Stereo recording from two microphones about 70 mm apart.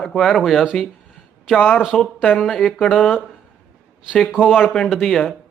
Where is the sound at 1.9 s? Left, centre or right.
Centre.